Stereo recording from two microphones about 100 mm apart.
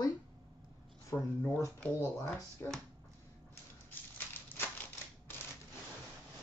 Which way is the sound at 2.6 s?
25° left (ahead or behind).